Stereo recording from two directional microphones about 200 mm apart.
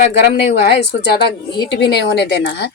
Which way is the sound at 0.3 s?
55° left (ahead or behind).